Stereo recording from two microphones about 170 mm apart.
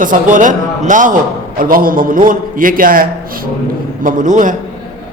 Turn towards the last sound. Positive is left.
turn(degrees=-50)  # may be behind; listen again after turning